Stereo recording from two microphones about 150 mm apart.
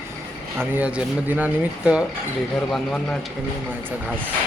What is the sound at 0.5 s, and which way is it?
Speech, 10° right (ahead or behind).